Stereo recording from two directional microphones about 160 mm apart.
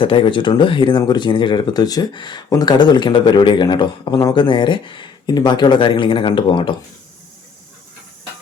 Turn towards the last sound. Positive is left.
turn(degrees=30)  # may be behind; listen again after turning